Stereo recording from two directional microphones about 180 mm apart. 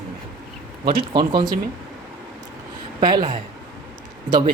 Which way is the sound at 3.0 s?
25° right (ahead or behind).